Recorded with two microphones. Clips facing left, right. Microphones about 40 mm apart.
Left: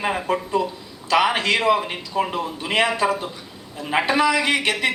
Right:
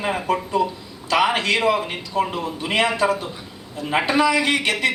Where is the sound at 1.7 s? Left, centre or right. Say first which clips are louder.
Left 1 dB; centre.